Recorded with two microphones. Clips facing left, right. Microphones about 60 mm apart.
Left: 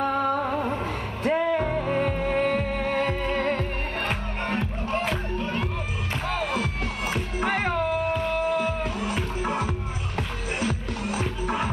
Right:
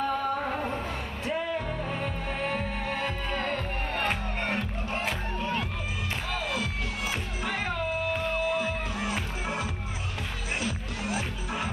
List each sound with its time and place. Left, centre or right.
0.0 s music: left
6.2 s music: left